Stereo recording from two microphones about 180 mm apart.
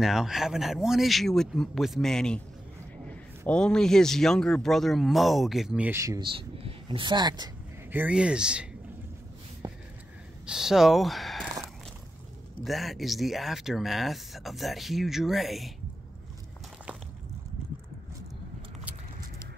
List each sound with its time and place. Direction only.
0.0 s a man's voice: centre (ahead or behind); by 7.5 s 25° right (ahead or behind)
7.9 s a man's voice: 10° right (ahead or behind)
9.6 s a sound: 20° right (ahead or behind)
10.4 s speech: 5° right (ahead or behind)
12.6 s a man's voice: centre (ahead or behind)